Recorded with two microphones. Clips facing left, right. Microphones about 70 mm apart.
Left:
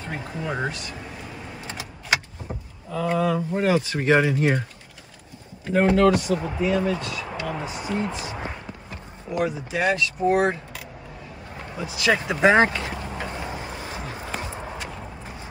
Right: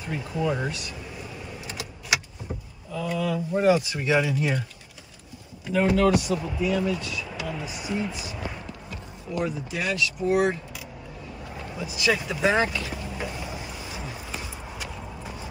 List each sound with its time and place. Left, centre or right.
0.1 s speech: left
2.9 s speech: left
5.7 s speech: left
9.3 s speech: left
9.8 s speech: left
11.7 s vehicle: left